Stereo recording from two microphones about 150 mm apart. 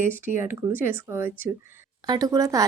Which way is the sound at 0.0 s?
15° right (ahead or behind).